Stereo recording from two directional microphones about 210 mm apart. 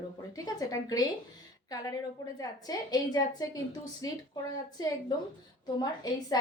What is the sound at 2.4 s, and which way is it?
A woman's voice, 20° left (ahead or behind).